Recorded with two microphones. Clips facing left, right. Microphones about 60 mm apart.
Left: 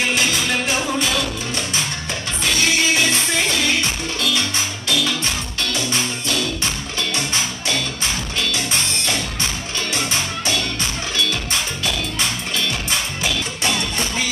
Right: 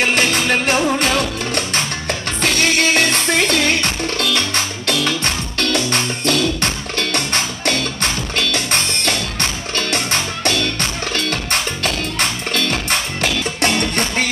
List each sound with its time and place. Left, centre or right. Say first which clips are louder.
0.0 s music: right 4 dB; right